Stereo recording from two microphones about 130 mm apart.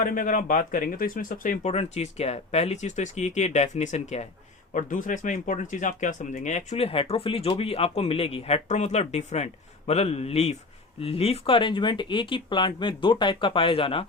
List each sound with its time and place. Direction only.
0.0 s speech: 80° left
1.7 s speech: 55° left (ahead or behind)
4.7 s speech: 80° left; by 14.0 s 45° left (ahead or behind)